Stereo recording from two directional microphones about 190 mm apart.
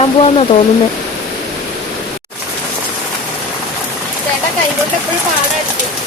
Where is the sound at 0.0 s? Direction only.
30° left (ahead or behind).